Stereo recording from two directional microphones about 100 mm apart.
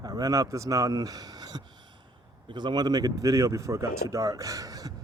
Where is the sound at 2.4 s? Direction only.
50° right (ahead or behind).